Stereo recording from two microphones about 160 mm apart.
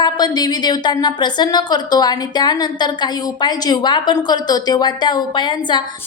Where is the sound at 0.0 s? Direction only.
25° left (ahead or behind).